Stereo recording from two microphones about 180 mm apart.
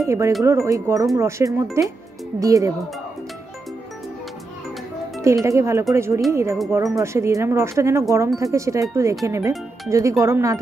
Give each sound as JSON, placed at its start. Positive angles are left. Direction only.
{"t": 0.0, "sound": "speech", "side_deg": -15}
{"t": 5.2, "sound": "speech", "side_deg": -15}